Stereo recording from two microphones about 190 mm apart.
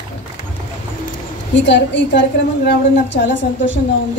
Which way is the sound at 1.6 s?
70° left (ahead or behind).